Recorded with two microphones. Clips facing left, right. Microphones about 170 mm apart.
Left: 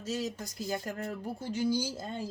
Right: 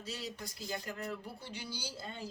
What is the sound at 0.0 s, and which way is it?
Speech, 45° left (ahead or behind).